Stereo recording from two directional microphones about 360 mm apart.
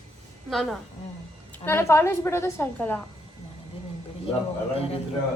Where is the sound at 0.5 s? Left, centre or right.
Centre.